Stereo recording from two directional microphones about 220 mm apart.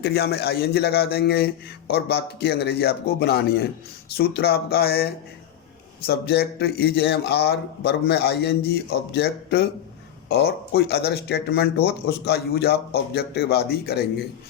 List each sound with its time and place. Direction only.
0.0 s speech: 45° left (ahead or behind)